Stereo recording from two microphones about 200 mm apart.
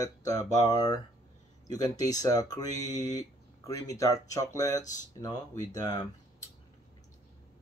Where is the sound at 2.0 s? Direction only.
20° left (ahead or behind).